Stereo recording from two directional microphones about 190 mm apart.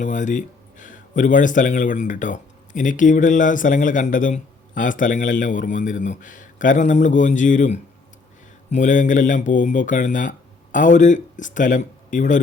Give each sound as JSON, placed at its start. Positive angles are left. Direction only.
{"t": 0.0, "sound": "speech", "side_deg": 40}